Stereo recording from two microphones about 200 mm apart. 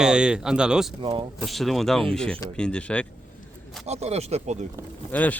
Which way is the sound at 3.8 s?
30° right (ahead or behind).